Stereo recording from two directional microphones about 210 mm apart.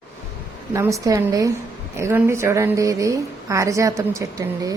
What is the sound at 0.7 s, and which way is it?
Speech, 15° right (ahead or behind).